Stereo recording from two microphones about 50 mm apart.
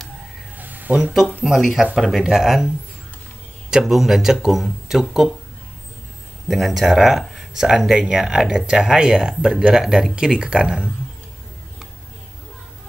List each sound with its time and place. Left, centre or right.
0.6 s a sound: right
1.4 s speech: centre
3.7 s speech: centre
6.5 s speech: centre